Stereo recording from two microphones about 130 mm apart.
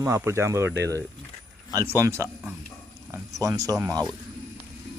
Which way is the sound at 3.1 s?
25° right (ahead or behind).